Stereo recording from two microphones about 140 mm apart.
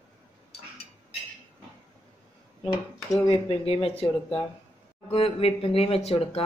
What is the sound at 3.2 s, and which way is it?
Speech, 45° left (ahead or behind).